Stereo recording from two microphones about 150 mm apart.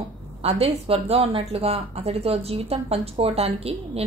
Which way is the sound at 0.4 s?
40° right (ahead or behind).